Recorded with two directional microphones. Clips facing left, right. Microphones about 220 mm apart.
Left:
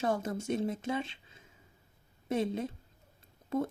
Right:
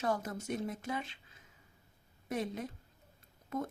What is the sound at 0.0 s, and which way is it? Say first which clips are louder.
Speech: left 3 dB; 25° left (ahead or behind).